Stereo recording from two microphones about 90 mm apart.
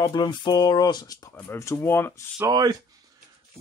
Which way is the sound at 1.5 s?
30° left (ahead or behind).